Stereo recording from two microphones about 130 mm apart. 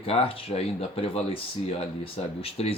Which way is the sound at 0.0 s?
50° left (ahead or behind).